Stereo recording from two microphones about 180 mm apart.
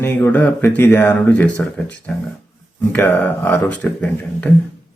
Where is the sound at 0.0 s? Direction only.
10° left (ahead or behind).